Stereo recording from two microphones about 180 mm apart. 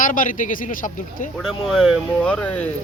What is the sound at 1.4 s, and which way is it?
Speech, centre (ahead or behind).